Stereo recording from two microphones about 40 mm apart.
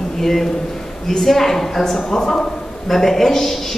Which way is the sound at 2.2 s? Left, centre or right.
Centre.